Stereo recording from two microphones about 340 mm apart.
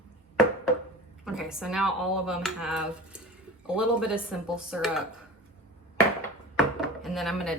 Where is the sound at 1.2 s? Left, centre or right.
Centre.